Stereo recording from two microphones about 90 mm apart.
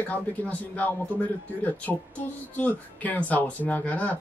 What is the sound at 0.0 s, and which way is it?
Speech, 20° left (ahead or behind).